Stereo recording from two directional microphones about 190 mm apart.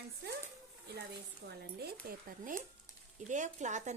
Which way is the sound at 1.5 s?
60° right (ahead or behind).